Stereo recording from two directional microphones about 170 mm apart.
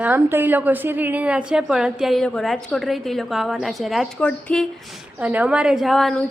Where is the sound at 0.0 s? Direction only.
10° right (ahead or behind); by 4.6 s 5° left (ahead or behind).